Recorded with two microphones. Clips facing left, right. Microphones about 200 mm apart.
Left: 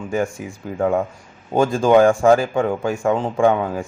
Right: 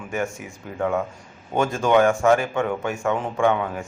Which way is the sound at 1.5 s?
30° left (ahead or behind).